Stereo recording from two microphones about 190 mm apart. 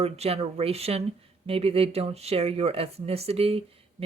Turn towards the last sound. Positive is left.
turn(degrees=-30)  # may be behind; listen again after turning